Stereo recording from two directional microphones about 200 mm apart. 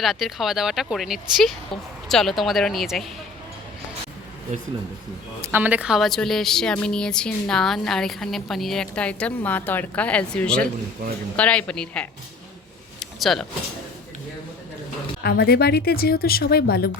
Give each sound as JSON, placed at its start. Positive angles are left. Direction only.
{"t": 0.0, "sound": "a woman's voice", "side_deg": 0}
{"t": 5.4, "sound": "a woman's voice", "side_deg": -10}
{"t": 13.0, "sound": "a sound", "side_deg": 0}
{"t": 15.2, "sound": "speech", "side_deg": 50}